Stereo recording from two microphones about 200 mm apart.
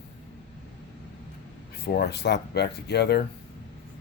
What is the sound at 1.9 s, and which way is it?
Speech, 55° left (ahead or behind).